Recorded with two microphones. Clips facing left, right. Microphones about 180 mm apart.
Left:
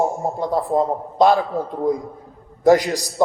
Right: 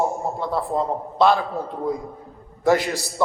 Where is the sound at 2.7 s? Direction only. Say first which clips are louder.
Left 3 dB; 15° left (ahead or behind).